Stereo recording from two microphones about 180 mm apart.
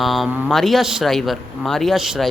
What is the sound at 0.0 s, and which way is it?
Speech, centre (ahead or behind).